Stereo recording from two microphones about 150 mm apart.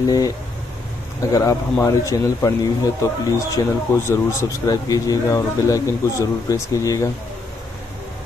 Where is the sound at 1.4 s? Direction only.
20° left (ahead or behind).